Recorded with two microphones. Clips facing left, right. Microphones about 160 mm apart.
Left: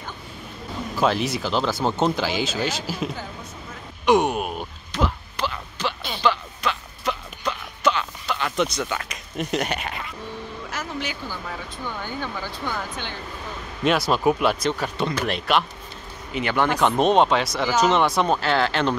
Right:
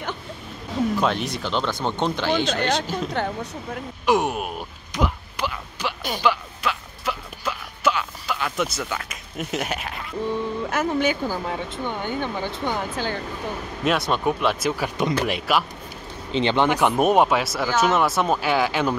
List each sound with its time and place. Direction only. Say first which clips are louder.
0.9 s speech: left 1 dB; centre (ahead or behind)
3.1 s a woman's voice: right 8 dB; 65° right (ahead or behind)
4.0 s speech: left 2 dB; centre (ahead or behind)
4.9 s a sound: even; 10° right (ahead or behind)
10.7 s speech: right 9 dB; 55° right (ahead or behind)
11.4 s speech: right 5 dB; 25° right (ahead or behind)
13.8 s speech: left 2 dB; centre (ahead or behind)
16.3 s speech: right 3 dB; 25° right (ahead or behind); by 18.9 s 10° right (ahead or behind)